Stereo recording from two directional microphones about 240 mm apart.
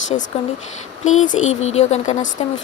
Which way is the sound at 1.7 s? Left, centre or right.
Left.